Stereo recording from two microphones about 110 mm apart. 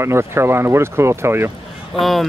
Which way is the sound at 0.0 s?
25° right (ahead or behind).